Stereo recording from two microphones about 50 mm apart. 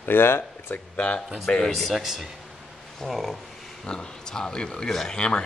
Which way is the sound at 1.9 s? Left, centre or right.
Centre.